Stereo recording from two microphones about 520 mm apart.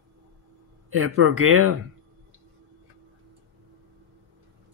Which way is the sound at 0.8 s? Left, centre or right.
Right.